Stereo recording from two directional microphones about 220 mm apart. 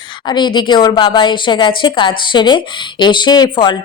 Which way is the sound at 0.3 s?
20° left (ahead or behind).